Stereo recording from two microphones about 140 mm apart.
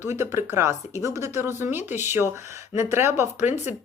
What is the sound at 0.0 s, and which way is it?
Speech, 20° right (ahead or behind).